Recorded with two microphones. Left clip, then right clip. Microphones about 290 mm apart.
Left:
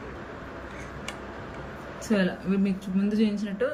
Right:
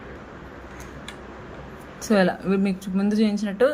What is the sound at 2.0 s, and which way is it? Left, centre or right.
Speech, centre.